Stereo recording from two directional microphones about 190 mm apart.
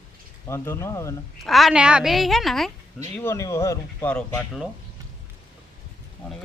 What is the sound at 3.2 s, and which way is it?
Speech, 15° left (ahead or behind).